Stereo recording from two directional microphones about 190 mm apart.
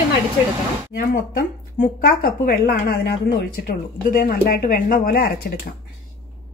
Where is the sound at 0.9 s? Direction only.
50° left (ahead or behind).